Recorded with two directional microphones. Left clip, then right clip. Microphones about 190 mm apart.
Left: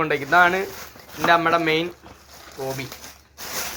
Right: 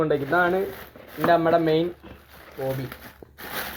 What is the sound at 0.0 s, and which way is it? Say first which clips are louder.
Speech: left 4 dB; 20° left (ahead or behind).